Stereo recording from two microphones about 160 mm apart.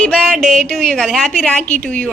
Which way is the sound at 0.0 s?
5° left (ahead or behind).